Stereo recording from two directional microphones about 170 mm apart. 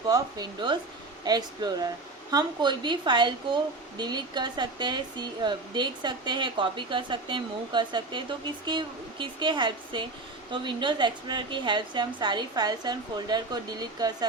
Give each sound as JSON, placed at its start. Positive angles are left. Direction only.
{"t": 0.1, "sound": "a woman's voice", "side_deg": -25}